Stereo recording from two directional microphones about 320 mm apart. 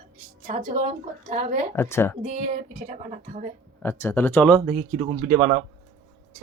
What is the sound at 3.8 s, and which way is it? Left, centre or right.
Speech, centre.